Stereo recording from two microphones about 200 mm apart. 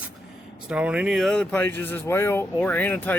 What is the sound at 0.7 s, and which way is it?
Speech, 5° right (ahead or behind).